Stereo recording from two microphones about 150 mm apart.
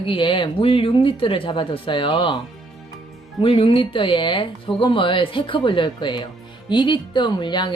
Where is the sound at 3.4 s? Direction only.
35° left (ahead or behind).